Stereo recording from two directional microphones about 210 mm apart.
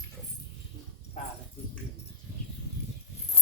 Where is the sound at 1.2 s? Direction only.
35° left (ahead or behind).